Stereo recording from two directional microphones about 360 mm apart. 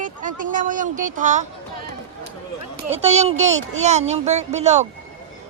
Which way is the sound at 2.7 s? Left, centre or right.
Right.